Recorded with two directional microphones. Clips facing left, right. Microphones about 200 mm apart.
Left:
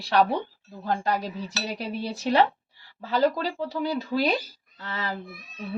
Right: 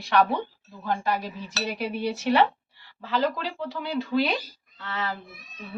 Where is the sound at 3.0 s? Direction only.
40° left (ahead or behind).